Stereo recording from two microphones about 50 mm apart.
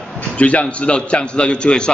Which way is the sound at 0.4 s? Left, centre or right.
Left.